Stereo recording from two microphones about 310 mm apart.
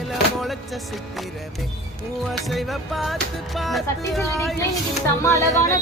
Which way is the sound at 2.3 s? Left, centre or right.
Centre.